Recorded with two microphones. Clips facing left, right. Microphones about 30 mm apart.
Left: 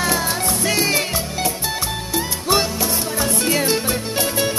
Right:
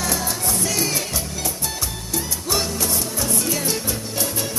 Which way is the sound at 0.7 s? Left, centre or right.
Left.